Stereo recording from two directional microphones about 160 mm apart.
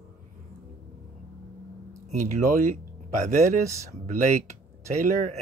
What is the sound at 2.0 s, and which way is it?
Speech, 50° right (ahead or behind).